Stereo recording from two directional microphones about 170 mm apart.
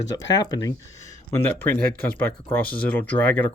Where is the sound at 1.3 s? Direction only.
10° left (ahead or behind).